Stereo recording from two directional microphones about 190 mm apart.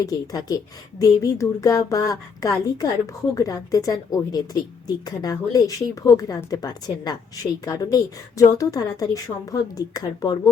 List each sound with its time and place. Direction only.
0.0 s a woman's voice: 20° left (ahead or behind)